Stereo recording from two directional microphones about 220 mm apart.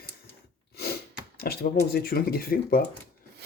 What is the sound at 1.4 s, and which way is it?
Speech, 45° left (ahead or behind).